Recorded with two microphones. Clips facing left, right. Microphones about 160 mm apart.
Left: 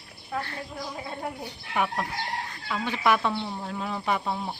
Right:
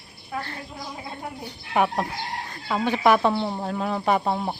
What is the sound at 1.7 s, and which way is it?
Speech, 45° right (ahead or behind).